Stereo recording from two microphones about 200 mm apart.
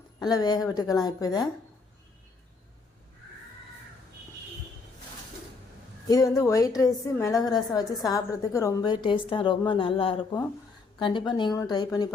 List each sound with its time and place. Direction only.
0.2 s a woman's voice: 20° left (ahead or behind)
6.1 s a woman's voice: 15° left (ahead or behind)